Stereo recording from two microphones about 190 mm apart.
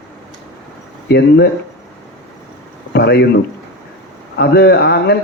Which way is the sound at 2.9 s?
60° left (ahead or behind).